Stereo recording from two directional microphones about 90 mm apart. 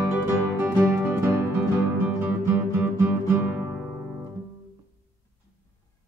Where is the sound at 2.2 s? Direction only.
25° right (ahead or behind).